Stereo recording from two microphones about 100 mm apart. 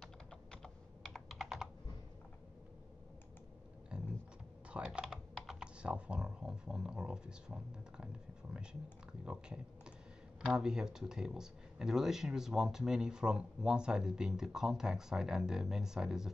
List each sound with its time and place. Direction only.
0.0 s typing: 5° left (ahead or behind)
1.1 s computer keyboard: 5° right (ahead or behind)
4.6 s computer keyboard: 10° right (ahead or behind)
5.0 s speech: 5° right (ahead or behind)
9.2 s speech: 10° right (ahead or behind)